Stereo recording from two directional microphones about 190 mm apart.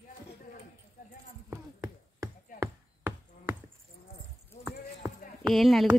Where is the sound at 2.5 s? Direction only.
10° right (ahead or behind).